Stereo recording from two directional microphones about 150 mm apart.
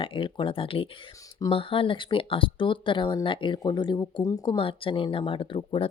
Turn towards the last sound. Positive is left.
turn(degrees=35)  # may be behind; listen again after turning